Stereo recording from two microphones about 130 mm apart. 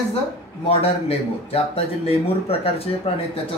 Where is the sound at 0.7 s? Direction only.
50° left (ahead or behind).